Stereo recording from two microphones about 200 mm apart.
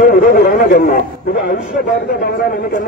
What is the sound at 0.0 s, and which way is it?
A man's voice, 45° left (ahead or behind).